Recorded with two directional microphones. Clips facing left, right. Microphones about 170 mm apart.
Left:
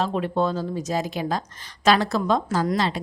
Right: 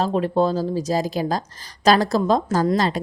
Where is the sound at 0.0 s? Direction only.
35° right (ahead or behind).